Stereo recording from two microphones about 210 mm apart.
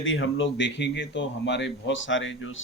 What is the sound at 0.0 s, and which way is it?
A man's voice, 65° left (ahead or behind).